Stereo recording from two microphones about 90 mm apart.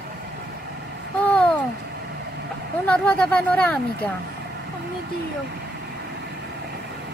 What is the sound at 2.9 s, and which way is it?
Speech, 15° left (ahead or behind).